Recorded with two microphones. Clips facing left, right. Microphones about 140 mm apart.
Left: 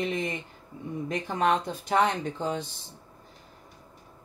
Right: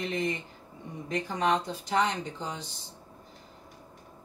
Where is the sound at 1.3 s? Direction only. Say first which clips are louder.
Left 2 dB; 55° left (ahead or behind).